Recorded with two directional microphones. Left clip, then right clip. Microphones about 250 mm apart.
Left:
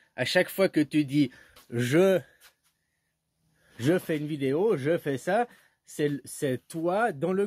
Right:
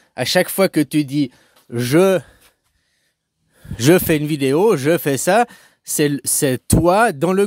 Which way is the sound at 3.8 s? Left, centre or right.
Right.